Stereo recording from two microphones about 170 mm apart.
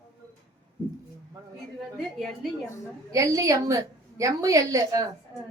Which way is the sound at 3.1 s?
20° right (ahead or behind).